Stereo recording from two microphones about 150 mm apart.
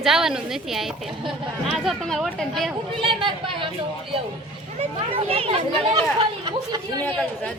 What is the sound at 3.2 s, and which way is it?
Speech, 35° right (ahead or behind).